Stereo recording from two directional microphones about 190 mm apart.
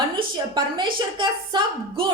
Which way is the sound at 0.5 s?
25° right (ahead or behind).